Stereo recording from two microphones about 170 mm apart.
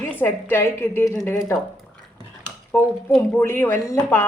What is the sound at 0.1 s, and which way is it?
A woman's voice, 10° left (ahead or behind).